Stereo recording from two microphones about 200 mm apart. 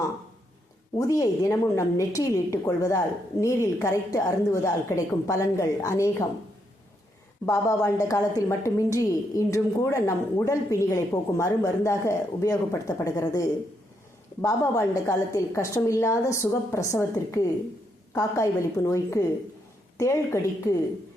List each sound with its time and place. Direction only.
0.9 s a woman's voice: 15° left (ahead or behind)
7.4 s a woman's voice: 15° left (ahead or behind)